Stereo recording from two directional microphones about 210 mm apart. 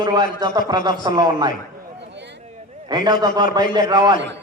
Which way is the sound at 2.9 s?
20° right (ahead or behind).